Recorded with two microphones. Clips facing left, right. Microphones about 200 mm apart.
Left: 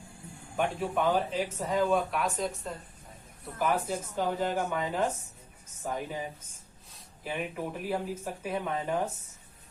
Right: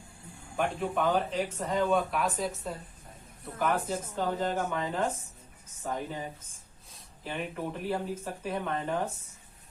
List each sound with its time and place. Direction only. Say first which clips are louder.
0.5 s speech: even; centre (ahead or behind)
7.3 s speech: left 1 dB; 10° left (ahead or behind)